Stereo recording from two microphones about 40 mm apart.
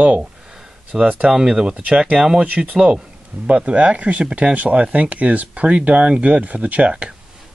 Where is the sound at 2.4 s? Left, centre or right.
Right.